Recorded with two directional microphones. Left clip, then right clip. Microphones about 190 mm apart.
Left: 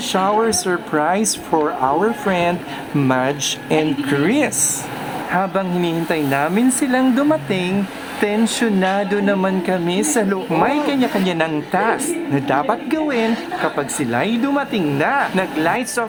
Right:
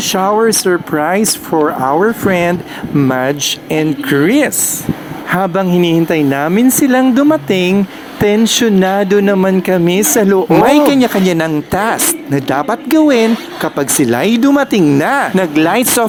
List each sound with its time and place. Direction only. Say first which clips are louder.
0.0 s speech: right 5 dB; 25° right (ahead or behind)